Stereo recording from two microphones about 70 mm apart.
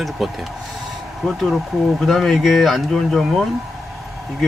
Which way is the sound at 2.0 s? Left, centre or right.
Centre.